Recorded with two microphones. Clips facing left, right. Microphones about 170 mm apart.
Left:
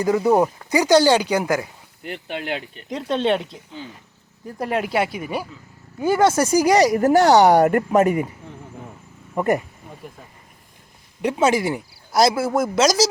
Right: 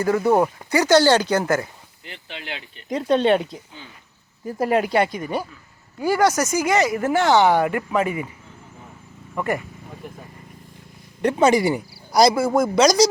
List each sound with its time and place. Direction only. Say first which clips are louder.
0.0 s speech: left 1 dB; 15° left (ahead or behind)
2.0 s speech: left 8 dB; 50° left (ahead or behind)
2.9 s speech: right 3 dB; centre (ahead or behind)
6.0 s speech: left 2 dB; 20° left (ahead or behind); by 8.3 s 45° left (ahead or behind)
9.3 s speech: left 5 dB; 35° left (ahead or behind)
11.2 s speech: right 2 dB; 5° left (ahead or behind)